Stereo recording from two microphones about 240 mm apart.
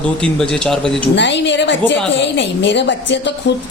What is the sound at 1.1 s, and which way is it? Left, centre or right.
Speech, left.